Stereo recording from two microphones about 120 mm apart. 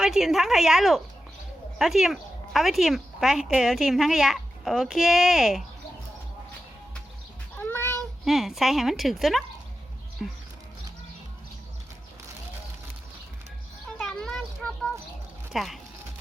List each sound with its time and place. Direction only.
0.0 s speech: 5° right (ahead or behind)
7.5 s cat: 15° left (ahead or behind)
8.2 s speech: centre (ahead or behind)
14.0 s a sound: 5° left (ahead or behind)
15.5 s speech: centre (ahead or behind)